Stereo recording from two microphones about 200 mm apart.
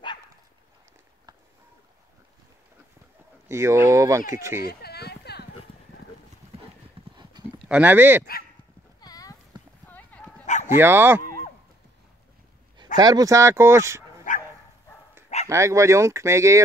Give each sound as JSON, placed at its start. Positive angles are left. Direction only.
{"t": 3.4, "sound": "speech", "side_deg": -15}
{"t": 4.6, "sound": "a sound", "side_deg": 55}
{"t": 6.4, "sound": "clip-clop", "side_deg": -35}
{"t": 7.2, "sound": "clip-clop", "side_deg": -20}
{"t": 7.6, "sound": "speech", "side_deg": -5}
{"t": 9.0, "sound": "clip-clop", "side_deg": 20}
{"t": 10.4, "sound": "bow-wow", "side_deg": 35}
{"t": 10.8, "sound": "speech", "side_deg": -10}
{"t": 12.9, "sound": "speech", "side_deg": -20}
{"t": 15.4, "sound": "speech", "side_deg": -15}